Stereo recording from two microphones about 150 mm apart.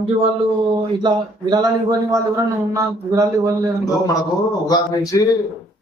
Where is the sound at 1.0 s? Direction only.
30° right (ahead or behind).